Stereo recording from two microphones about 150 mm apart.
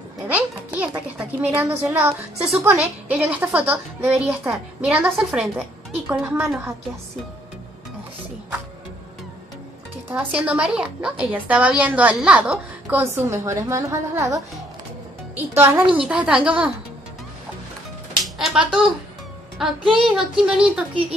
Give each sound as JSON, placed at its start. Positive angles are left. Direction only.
{"t": 0.3, "sound": "music", "side_deg": -10}
{"t": 3.1, "sound": "a woman's voice", "side_deg": -10}
{"t": 6.0, "sound": "a woman's voice", "side_deg": -15}
{"t": 10.0, "sound": "a woman's voice", "side_deg": -10}
{"t": 18.2, "sound": "a child's voice", "side_deg": -5}